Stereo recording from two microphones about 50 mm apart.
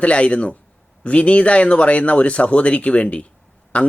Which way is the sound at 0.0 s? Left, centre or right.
Left.